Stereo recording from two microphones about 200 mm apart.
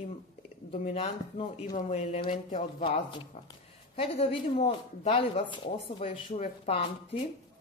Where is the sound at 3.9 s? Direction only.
30° left (ahead or behind).